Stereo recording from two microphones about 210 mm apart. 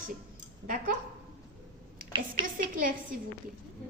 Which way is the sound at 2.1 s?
20° right (ahead or behind).